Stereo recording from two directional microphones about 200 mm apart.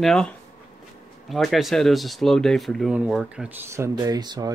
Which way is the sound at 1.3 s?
Centre (ahead or behind).